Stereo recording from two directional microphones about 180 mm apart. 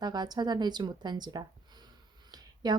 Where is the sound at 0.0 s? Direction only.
25° right (ahead or behind).